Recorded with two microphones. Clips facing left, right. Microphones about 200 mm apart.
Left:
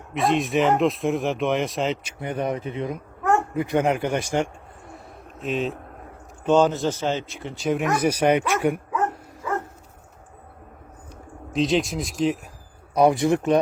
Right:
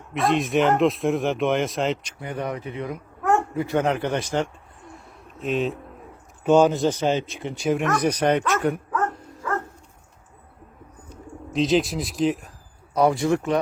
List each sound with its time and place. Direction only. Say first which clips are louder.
0.1 s speech: even; centre (ahead or behind)
2.2 s speech: left 3 dB; 20° left (ahead or behind)
5.4 s speech: right 2 dB; centre (ahead or behind); by 7.7 s 15° right (ahead or behind)
7.9 s bow-wow: left 3 dB; 10° left (ahead or behind)
11.5 s speech: right 1 dB; centre (ahead or behind)
12.9 s speech: left 2 dB; 15° left (ahead or behind)